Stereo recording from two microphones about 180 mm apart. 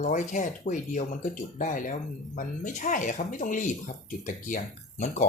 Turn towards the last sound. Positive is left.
turn(degrees=45)  # may be behind; listen again after turning